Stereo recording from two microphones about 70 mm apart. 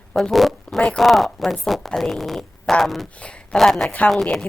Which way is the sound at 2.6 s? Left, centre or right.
Centre.